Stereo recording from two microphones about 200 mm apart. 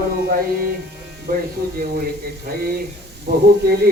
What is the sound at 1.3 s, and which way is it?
Speech, 50° right (ahead or behind).